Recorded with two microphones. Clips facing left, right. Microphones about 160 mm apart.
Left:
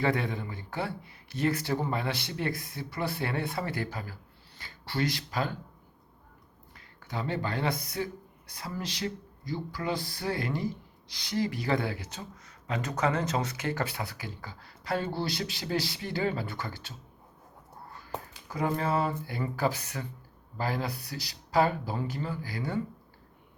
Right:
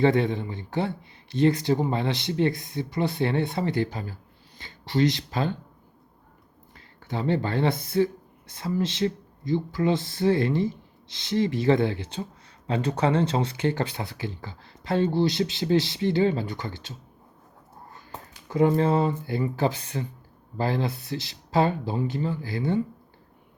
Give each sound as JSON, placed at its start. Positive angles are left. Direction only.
{"t": 0.0, "sound": "speech", "side_deg": -25}
{"t": 6.7, "sound": "speech", "side_deg": -25}
{"t": 18.4, "sound": "speech", "side_deg": -25}